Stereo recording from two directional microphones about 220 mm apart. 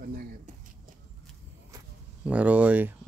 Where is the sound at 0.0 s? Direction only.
45° right (ahead or behind).